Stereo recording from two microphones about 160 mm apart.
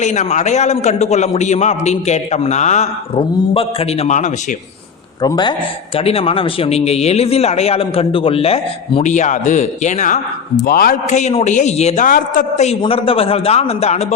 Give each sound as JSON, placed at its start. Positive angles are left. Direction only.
{"t": 0.0, "sound": "a man's voice", "side_deg": 50}
{"t": 5.2, "sound": "speech", "side_deg": 25}
{"t": 9.0, "sound": "a man's voice", "side_deg": 50}
{"t": 10.6, "sound": "a man's voice", "side_deg": 65}
{"t": 12.0, "sound": "a man's voice", "side_deg": 60}
{"t": 12.6, "sound": "speech", "side_deg": 35}